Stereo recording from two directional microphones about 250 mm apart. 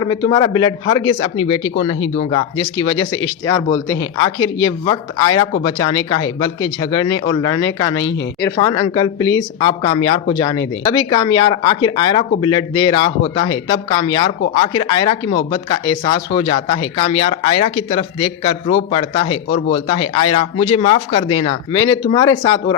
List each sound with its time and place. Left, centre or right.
0.0 s speech: centre